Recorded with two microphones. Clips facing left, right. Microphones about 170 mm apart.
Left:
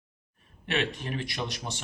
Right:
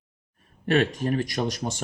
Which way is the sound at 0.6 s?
45° right (ahead or behind).